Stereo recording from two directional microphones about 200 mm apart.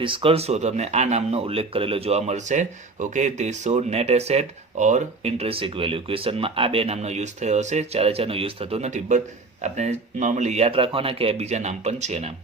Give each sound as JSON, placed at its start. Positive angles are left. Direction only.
{"t": 0.0, "sound": "speech", "side_deg": -25}